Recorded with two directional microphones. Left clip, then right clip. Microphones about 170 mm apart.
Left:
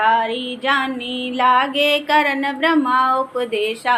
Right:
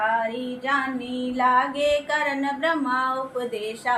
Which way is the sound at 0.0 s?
45° left (ahead or behind).